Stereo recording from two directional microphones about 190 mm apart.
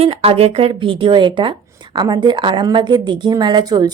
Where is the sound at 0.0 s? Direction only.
30° right (ahead or behind).